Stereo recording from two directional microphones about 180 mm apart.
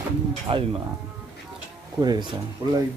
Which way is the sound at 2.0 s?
25° right (ahead or behind).